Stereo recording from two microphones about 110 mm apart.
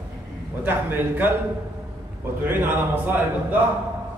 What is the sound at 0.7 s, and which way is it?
Speech, 15° right (ahead or behind).